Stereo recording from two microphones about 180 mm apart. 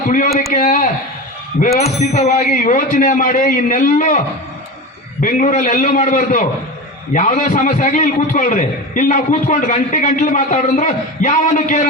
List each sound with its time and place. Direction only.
0.5 s a man's voice: 45° left (ahead or behind)
5.2 s a man's voice: 45° left (ahead or behind)